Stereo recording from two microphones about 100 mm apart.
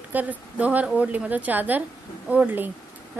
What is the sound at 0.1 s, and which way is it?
A woman's voice, 15° right (ahead or behind).